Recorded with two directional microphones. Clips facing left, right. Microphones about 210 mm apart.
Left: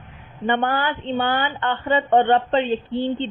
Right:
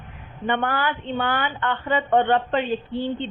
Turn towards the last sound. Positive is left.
turn(degrees=25)  # may be behind; listen again after turning